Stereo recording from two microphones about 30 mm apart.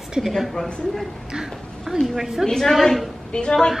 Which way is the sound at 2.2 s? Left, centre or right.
Centre.